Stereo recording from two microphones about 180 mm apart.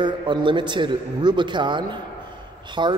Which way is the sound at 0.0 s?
25° right (ahead or behind).